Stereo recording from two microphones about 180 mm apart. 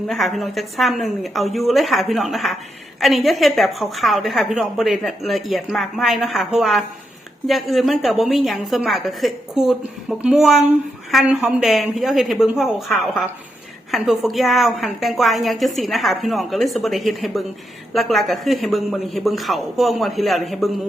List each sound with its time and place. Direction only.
0.1 s a woman's voice: centre (ahead or behind)